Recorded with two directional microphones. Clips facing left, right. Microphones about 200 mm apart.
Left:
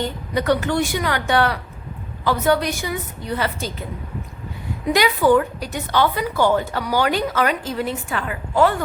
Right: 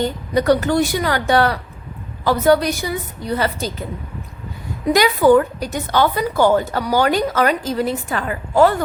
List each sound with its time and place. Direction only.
0.3 s a woman's voice: 40° right (ahead or behind)
4.9 s a woman's voice: 45° right (ahead or behind)